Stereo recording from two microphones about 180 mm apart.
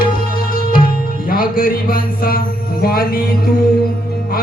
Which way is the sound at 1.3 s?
50° left (ahead or behind).